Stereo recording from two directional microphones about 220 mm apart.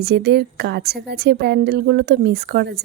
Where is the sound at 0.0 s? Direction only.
45° right (ahead or behind).